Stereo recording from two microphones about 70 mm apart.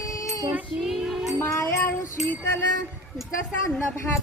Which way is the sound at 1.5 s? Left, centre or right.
Left.